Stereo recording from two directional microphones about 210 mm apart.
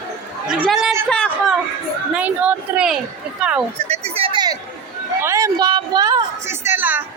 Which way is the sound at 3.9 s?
25° right (ahead or behind).